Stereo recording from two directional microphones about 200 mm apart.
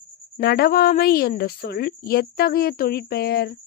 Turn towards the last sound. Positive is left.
turn(degrees=50)  # may be behind; listen again after turning